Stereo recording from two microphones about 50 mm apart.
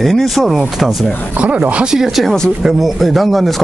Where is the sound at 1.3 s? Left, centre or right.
Right.